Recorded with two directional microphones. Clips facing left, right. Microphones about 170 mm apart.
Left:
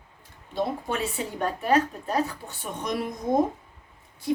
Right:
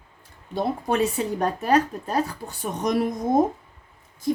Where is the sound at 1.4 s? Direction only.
40° right (ahead or behind).